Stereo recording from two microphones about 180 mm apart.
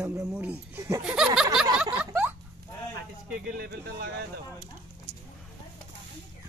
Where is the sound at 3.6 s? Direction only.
60° right (ahead or behind).